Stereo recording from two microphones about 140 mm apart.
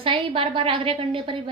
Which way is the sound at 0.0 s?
40° right (ahead or behind).